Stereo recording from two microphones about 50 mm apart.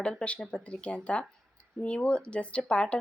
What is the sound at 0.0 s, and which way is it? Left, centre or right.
Speech, centre.